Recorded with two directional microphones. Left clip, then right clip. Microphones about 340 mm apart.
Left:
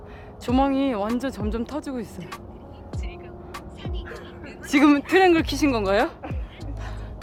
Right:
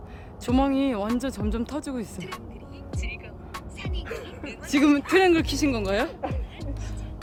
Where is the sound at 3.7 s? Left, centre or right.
Right.